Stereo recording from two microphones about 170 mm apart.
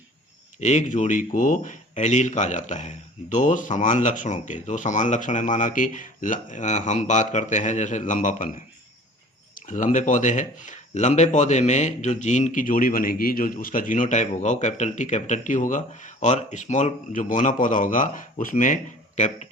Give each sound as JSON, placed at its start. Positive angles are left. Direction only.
{"t": 0.6, "sound": "speech", "side_deg": 45}